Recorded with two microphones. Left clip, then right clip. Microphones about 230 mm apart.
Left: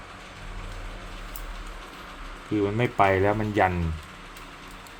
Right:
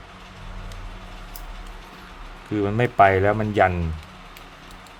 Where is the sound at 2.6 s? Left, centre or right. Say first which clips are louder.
Right 6 dB; right.